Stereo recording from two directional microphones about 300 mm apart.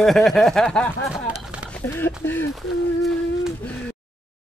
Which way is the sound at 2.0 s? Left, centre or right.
Centre.